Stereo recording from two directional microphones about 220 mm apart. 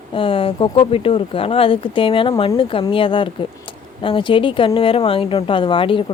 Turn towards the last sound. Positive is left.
turn(degrees=25)  # may be behind; listen again after turning